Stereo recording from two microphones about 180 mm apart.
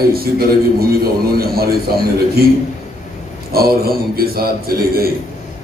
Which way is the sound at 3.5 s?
60° right (ahead or behind).